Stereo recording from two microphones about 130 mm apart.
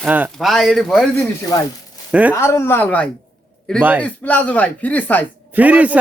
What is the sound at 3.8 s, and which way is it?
Speech, 15° right (ahead or behind).